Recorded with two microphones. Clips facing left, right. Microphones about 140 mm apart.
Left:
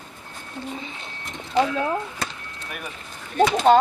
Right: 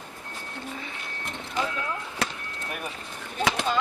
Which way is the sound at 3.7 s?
65° left (ahead or behind).